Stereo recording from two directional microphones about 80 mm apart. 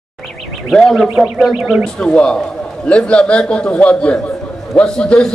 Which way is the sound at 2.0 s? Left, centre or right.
Centre.